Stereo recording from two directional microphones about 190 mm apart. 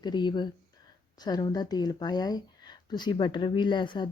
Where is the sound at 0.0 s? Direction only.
20° left (ahead or behind).